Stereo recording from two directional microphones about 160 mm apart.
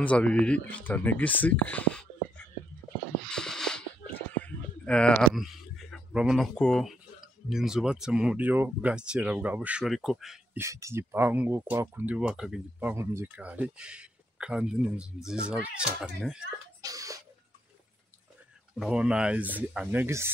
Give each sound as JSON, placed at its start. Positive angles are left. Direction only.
{"t": 0.0, "sound": "speech", "side_deg": 10}
{"t": 10.6, "sound": "speech", "side_deg": -20}
{"t": 12.9, "sound": "speech", "side_deg": -15}
{"t": 16.8, "sound": "a sound", "side_deg": -20}
{"t": 18.8, "sound": "speech", "side_deg": -5}